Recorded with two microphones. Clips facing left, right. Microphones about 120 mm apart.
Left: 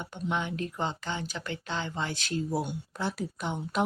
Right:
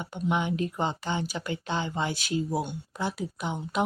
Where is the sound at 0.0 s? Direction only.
15° right (ahead or behind).